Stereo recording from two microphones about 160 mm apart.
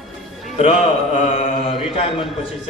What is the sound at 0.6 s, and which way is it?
A man's voice, 45° left (ahead or behind).